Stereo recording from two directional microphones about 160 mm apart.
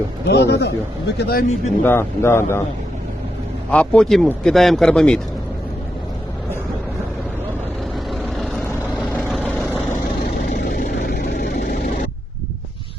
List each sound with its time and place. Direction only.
0.3 s a man's voice: 90° left
1.8 s a man's voice: 15° left (ahead or behind)
3.7 s speech: 5° left (ahead or behind)
8.1 s vehicle: centre (ahead or behind)
10.6 s vehicle: 70° left (ahead or behind)